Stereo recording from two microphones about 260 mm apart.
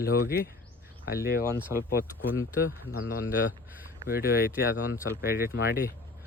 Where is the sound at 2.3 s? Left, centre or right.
Left.